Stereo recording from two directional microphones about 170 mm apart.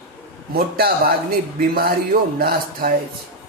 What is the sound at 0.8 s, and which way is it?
Speech, 65° right (ahead or behind).